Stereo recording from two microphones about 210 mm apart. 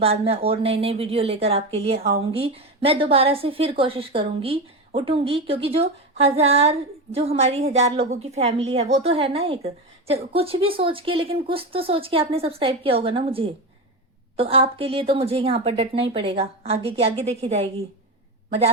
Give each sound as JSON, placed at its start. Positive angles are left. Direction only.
{"t": 0.0, "sound": "a woman's voice", "side_deg": -30}